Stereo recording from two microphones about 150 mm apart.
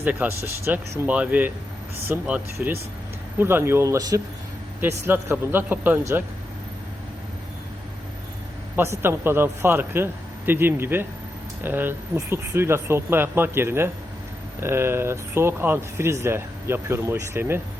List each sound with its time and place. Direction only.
0.0 s speech: 15° right (ahead or behind)
8.7 s speech: 15° right (ahead or behind)